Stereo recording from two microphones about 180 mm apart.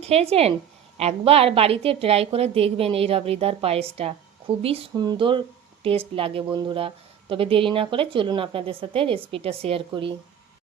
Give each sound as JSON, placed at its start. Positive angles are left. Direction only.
{"t": 0.0, "sound": "a woman's voice", "side_deg": -35}